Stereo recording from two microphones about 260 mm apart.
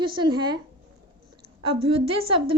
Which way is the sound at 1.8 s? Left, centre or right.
Right.